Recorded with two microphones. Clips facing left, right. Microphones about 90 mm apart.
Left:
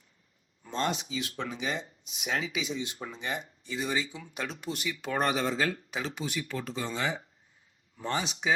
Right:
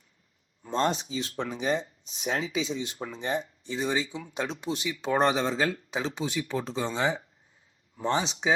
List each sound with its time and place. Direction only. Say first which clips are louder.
0.7 s speech: right 4 dB; 35° right (ahead or behind)